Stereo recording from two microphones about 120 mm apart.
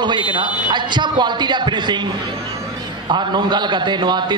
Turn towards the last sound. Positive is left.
turn(degrees=-40)  # may be behind; listen again after turning